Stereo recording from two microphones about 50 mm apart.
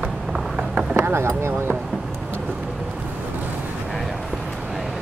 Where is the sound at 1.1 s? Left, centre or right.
Right.